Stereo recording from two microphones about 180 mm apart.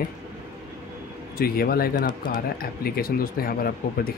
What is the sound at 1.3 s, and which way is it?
Speech, 55° left (ahead or behind).